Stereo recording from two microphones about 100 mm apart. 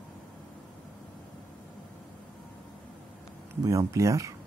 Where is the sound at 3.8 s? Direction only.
30° right (ahead or behind).